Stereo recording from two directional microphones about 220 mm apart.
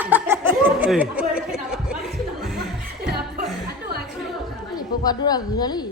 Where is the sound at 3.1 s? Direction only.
45° right (ahead or behind).